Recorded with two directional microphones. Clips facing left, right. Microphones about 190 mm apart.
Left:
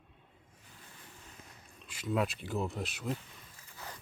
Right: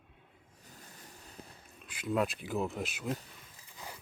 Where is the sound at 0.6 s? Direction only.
40° right (ahead or behind).